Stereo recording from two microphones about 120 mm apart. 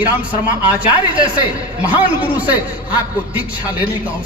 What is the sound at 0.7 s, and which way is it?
A man's voice, 10° right (ahead or behind).